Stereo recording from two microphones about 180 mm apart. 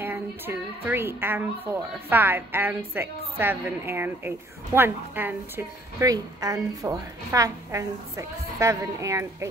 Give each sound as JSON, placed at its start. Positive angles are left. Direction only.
{"t": 0.0, "sound": "a woman's voice", "side_deg": -10}